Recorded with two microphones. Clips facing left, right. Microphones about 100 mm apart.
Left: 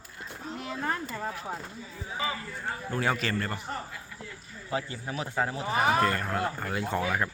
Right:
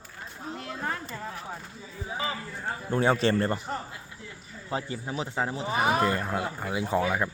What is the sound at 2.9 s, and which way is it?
Speech, 25° right (ahead or behind).